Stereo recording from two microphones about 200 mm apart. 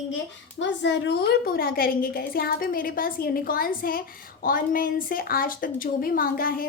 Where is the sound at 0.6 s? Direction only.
60° left (ahead or behind).